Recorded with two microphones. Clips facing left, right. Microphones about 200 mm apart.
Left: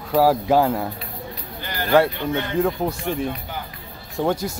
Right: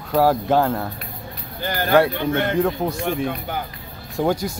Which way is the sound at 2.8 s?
10° left (ahead or behind).